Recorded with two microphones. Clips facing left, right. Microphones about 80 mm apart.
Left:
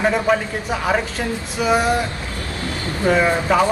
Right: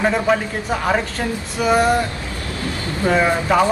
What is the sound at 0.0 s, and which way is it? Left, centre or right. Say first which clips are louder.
A man's voice: even; centre.